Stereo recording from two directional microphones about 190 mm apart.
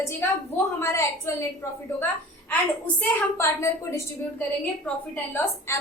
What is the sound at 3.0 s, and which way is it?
A woman's voice, 15° left (ahead or behind).